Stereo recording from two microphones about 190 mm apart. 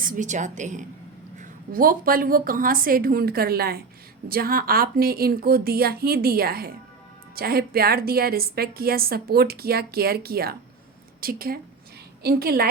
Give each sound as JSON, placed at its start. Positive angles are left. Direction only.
{"t": 0.0, "sound": "a woman's voice", "side_deg": -45}